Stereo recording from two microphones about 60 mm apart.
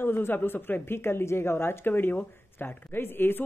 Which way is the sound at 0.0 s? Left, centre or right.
Left.